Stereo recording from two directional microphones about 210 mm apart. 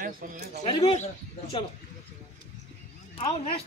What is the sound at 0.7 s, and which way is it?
Speech, 25° left (ahead or behind).